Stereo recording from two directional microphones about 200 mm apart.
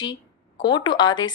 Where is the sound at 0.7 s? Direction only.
20° left (ahead or behind).